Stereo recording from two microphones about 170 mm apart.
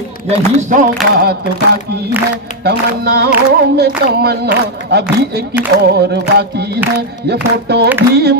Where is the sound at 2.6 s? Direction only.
70° right (ahead or behind).